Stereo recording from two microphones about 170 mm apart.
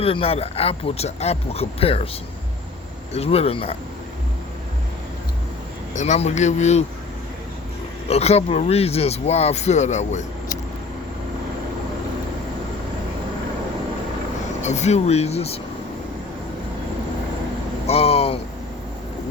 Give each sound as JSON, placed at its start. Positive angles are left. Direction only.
{"t": 0.0, "sound": "speech", "side_deg": 35}
{"t": 3.1, "sound": "speech", "side_deg": 35}
{"t": 5.9, "sound": "speech", "side_deg": 45}
{"t": 8.0, "sound": "speech", "side_deg": 40}
{"t": 14.6, "sound": "speech", "side_deg": 40}
{"t": 17.8, "sound": "a sound", "side_deg": 35}